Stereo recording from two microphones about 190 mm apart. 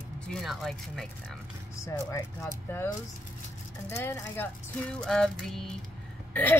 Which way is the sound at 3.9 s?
10° left (ahead or behind).